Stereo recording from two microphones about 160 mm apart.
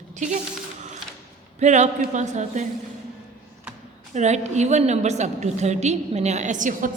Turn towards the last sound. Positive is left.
turn(degrees=-55)  # may be behind; listen again after turning